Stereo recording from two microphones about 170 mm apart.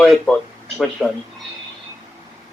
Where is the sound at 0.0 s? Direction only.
Centre (ahead or behind).